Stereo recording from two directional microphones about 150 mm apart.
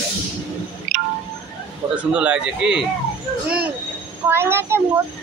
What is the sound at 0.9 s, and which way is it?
Music, 70° right (ahead or behind).